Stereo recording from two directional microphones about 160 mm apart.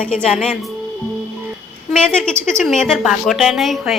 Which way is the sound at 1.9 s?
5° left (ahead or behind).